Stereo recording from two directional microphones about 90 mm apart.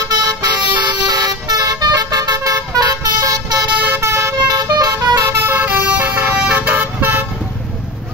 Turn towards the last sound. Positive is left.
turn(degrees=-20)  # may be behind; listen again after turning